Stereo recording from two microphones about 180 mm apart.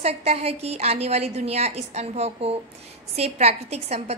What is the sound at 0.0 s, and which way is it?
A woman's voice, 35° right (ahead or behind).